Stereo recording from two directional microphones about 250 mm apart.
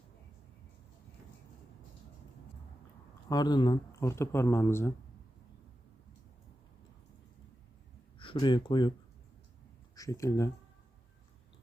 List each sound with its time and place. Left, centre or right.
3.2 s speech: centre
8.2 s speech: centre
9.9 s speech: centre